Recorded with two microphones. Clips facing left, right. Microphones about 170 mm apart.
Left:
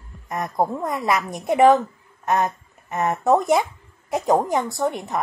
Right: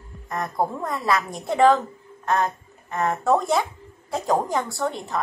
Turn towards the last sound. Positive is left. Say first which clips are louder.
# left 3 dB
turn(degrees=20)  # may be behind; listen again after turning